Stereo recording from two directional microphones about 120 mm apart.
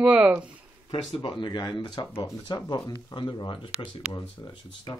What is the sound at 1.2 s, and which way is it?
Speech, 40° left (ahead or behind).